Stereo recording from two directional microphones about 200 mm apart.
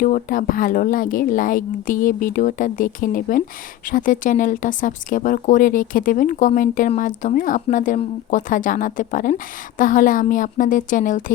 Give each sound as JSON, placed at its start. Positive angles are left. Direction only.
{"t": 0.0, "sound": "speech", "side_deg": 45}